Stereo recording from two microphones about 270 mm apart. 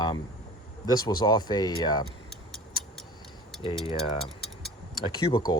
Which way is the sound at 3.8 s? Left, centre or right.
Centre.